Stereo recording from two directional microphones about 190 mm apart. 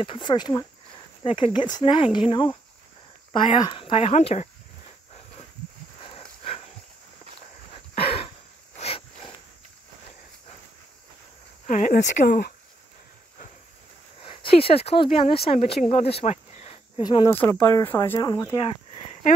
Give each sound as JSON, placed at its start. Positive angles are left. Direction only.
{"t": 0.0, "sound": "speech", "side_deg": 25}
{"t": 3.6, "sound": "speech", "side_deg": 25}
{"t": 7.9, "sound": "a sound", "side_deg": 30}
{"t": 11.6, "sound": "speech", "side_deg": 45}
{"t": 14.6, "sound": "speech", "side_deg": 30}
{"t": 15.9, "sound": "cricket", "side_deg": 30}
{"t": 17.0, "sound": "speech", "side_deg": 20}